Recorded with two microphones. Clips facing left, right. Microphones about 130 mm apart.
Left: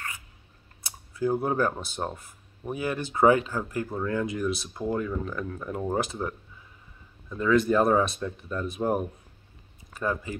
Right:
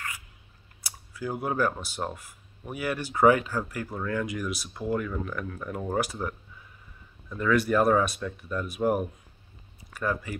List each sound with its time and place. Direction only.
1.1 s speech: 25° left (ahead or behind)
7.3 s speech: 25° left (ahead or behind)
9.9 s speech: 25° left (ahead or behind)